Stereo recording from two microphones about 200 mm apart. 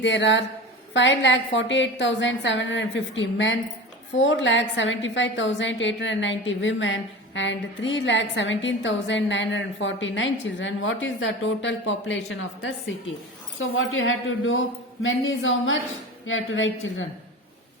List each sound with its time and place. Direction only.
0.0 s a woman's voice: 65° left (ahead or behind)
13.6 s a woman's voice: 75° left (ahead or behind)